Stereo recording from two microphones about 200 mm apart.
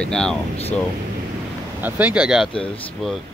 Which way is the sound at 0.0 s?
5° left (ahead or behind).